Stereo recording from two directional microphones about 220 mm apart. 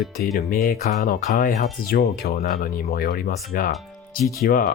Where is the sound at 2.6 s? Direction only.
45° left (ahead or behind).